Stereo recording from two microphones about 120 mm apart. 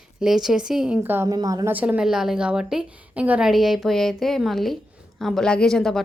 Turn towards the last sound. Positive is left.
turn(degrees=5)  # may be behind; listen again after turning